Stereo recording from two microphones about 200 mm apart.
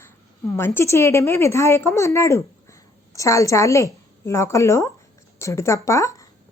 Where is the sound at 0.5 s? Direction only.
10° left (ahead or behind).